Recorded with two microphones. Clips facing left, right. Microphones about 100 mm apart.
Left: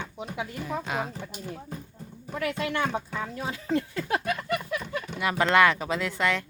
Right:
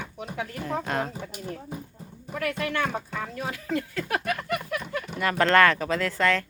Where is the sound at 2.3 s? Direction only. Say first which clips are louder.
Even; 20° left (ahead or behind).